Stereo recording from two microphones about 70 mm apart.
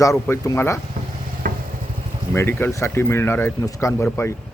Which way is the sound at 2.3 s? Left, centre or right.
Left.